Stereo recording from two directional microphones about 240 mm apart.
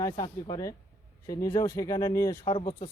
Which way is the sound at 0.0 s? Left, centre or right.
Centre.